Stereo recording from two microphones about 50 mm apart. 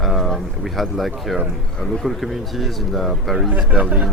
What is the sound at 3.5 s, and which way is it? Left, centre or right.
Speech, right.